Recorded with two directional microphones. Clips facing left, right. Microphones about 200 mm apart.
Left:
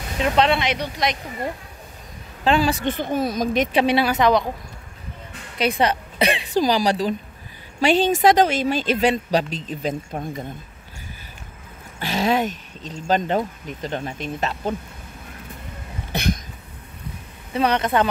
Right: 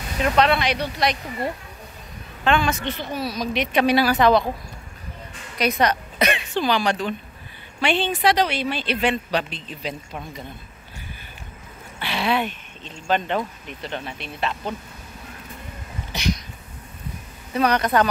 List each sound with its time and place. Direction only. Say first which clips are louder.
0.2 s speech: even; 25° left (ahead or behind)
2.4 s a woman's voice: left 2 dB; 35° left (ahead or behind)
2.8 s speech: left 5 dB; 50° left (ahead or behind)
3.7 s speech: right 4 dB; 25° left (ahead or behind)
5.6 s a woman's voice: left 1 dB; 30° left (ahead or behind); by 10.4 s 45° left (ahead or behind)
12.0 s a woman's voice: left 3 dB; 40° left (ahead or behind)
16.1 s a sound: left 2 dB; 55° left (ahead or behind)
17.6 s speech: even; 25° left (ahead or behind)